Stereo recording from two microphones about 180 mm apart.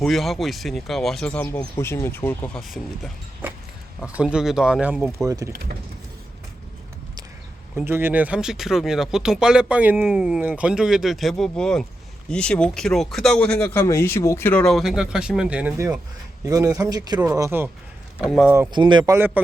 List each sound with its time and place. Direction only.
0.0 s speech: centre (ahead or behind)
3.4 s a sound: 10° right (ahead or behind)
4.0 s speech: 5° right (ahead or behind)
5.2 s speech: 20° right (ahead or behind)
7.8 s speech: 10° right (ahead or behind)
16.5 s speech: 20° right (ahead or behind)
18.3 s speech: centre (ahead or behind)
18.7 s speech: 25° right (ahead or behind)